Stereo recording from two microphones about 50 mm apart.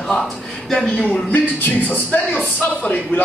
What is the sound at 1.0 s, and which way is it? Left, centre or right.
Speech, left.